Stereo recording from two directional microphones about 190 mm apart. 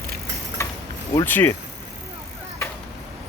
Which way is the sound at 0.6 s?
15° left (ahead or behind).